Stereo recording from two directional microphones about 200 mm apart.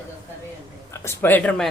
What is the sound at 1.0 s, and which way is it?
Speech, 10° left (ahead or behind).